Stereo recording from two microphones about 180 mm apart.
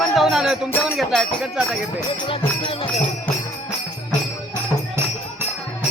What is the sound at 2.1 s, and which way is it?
Speech, 30° left (ahead or behind).